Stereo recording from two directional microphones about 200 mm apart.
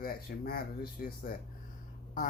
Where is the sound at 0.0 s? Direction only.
45° left (ahead or behind).